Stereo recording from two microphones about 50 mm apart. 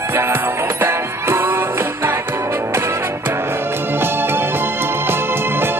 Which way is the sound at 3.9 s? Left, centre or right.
Right.